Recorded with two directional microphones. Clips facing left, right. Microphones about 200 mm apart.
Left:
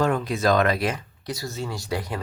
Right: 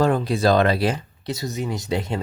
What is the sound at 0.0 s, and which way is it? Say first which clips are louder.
Speech: right 3 dB; 35° right (ahead or behind).